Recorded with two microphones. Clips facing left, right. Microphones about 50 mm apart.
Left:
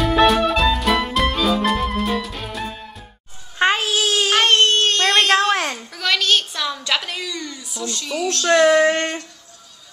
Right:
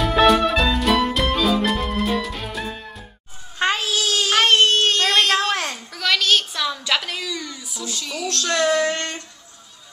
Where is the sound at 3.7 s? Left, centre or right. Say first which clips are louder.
Left 2 dB; left.